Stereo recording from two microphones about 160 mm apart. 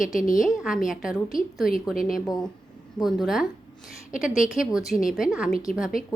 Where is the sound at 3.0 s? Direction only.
Centre (ahead or behind).